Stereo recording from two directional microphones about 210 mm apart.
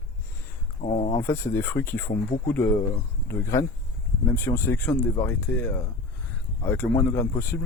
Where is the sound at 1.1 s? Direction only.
10° left (ahead or behind).